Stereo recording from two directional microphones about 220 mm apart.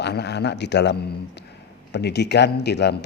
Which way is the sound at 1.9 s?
50° left (ahead or behind).